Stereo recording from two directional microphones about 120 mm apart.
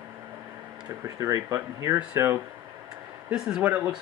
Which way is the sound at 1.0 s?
25° right (ahead or behind).